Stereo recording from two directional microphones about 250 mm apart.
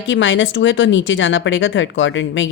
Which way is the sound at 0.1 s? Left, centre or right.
Left.